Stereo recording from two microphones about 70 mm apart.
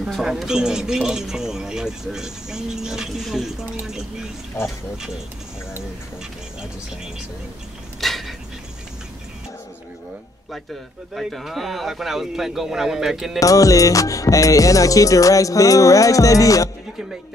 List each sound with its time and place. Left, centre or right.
0.2 s speech: centre
8.0 s a sound: centre
11.1 s speech: centre
13.4 s music: left